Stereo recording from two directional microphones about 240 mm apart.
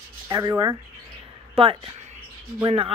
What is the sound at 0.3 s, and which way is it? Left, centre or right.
Speech, centre.